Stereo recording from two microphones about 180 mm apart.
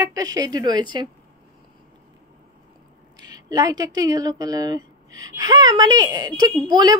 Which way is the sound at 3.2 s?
20° right (ahead or behind).